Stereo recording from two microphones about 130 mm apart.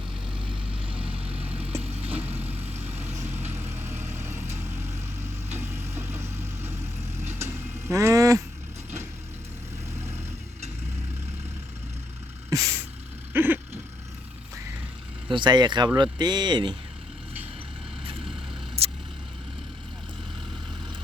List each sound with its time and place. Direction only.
0.5 s vehicle: 10° right (ahead or behind); by 8.4 s 25° right (ahead or behind)
12.5 s vehicle: 25° right (ahead or behind)
13.3 s vehicle: 15° right (ahead or behind)
15.3 s speech: 35° right (ahead or behind)
18.8 s vehicle: 50° right (ahead or behind)